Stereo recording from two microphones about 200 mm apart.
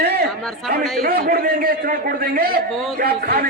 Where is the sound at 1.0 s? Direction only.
50° right (ahead or behind).